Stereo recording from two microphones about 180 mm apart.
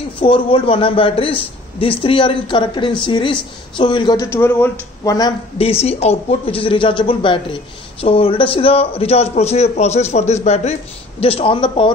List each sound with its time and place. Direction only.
0.2 s a man's voice: 30° left (ahead or behind)
5.6 s a man's voice: 35° left (ahead or behind)